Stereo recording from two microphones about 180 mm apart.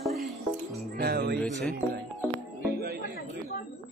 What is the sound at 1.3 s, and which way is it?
Speech, centre (ahead or behind).